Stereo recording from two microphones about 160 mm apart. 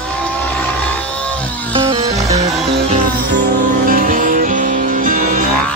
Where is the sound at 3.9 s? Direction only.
55° right (ahead or behind).